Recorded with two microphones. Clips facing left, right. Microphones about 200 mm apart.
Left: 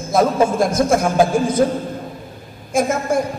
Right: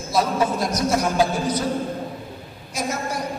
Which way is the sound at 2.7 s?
50° left (ahead or behind).